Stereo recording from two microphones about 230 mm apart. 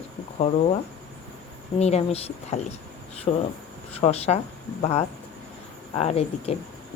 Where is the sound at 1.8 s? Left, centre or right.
Left.